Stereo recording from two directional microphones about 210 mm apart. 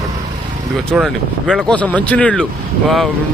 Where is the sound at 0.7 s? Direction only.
Centre (ahead or behind).